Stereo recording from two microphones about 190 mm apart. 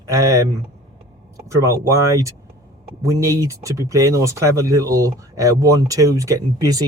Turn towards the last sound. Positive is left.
turn(degrees=-20)  # may be behind; listen again after turning